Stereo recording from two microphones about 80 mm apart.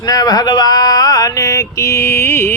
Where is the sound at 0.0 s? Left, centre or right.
Left.